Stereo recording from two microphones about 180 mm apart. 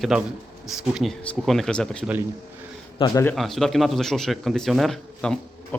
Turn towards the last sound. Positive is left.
turn(degrees=0)  # may be behind; listen again after turning